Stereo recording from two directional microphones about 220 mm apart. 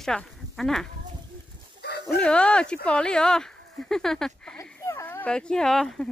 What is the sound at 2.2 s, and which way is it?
Speech, 5° left (ahead or behind).